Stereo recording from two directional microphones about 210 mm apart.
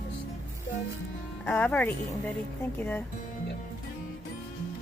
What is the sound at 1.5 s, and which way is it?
Speech, 5° left (ahead or behind).